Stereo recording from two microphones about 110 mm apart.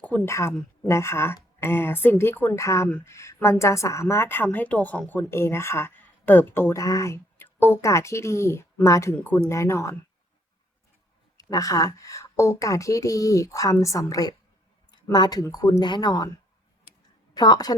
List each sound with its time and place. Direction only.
0.3 s a woman's voice: 25° left (ahead or behind)
9.2 s speech: 15° left (ahead or behind)
9.5 s a woman's voice: 25° left (ahead or behind)
11.3 s a woman's voice: 35° left (ahead or behind)
14.8 s a sound: 40° left (ahead or behind)
15.5 s speech: 35° left (ahead or behind)
17.3 s speech: 40° left (ahead or behind)